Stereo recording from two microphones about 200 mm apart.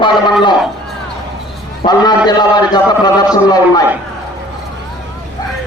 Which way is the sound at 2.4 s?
20° left (ahead or behind).